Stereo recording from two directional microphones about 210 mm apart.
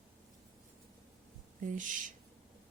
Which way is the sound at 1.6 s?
40° right (ahead or behind).